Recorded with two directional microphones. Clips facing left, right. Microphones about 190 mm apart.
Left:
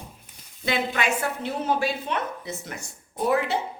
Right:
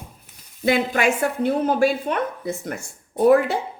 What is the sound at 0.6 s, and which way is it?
A woman's voice, 50° right (ahead or behind).